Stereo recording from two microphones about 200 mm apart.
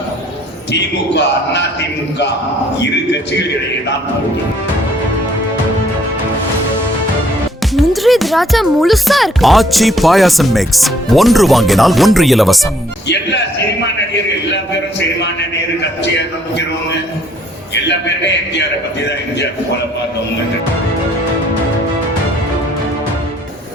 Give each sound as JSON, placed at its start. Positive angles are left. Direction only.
{"t": 0.7, "sound": "a man's voice", "side_deg": 60}
{"t": 7.8, "sound": "speech", "side_deg": 0}
{"t": 14.5, "sound": "a sound", "side_deg": 60}